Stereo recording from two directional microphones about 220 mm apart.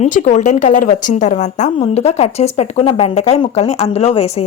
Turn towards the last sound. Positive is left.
turn(degrees=30)  # may be behind; listen again after turning